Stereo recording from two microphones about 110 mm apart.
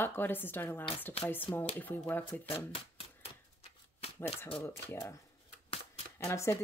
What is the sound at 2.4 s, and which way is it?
Speech, 60° left (ahead or behind).